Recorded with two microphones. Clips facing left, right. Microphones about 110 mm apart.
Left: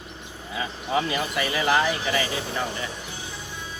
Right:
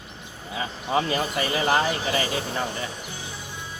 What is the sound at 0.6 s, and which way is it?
Speech, 35° right (ahead or behind).